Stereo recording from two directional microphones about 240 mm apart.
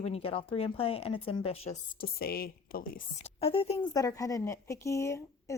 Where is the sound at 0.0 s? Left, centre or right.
Left.